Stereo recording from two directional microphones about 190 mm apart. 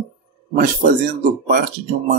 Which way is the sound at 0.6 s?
45° right (ahead or behind).